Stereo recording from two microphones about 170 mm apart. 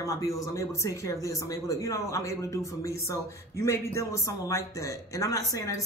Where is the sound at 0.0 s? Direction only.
20° left (ahead or behind).